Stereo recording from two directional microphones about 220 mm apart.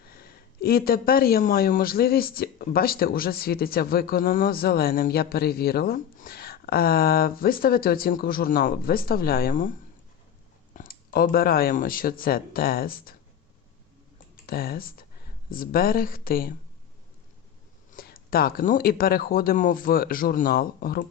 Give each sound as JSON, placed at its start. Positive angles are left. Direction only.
{"t": 0.0, "sound": "speech", "side_deg": 45}
{"t": 10.8, "sound": "speech", "side_deg": 40}
{"t": 14.4, "sound": "speech", "side_deg": 45}
{"t": 17.9, "sound": "speech", "side_deg": 40}